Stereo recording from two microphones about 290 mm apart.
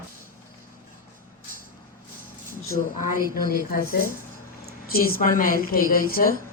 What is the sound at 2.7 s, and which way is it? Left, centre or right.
A woman's voice, left.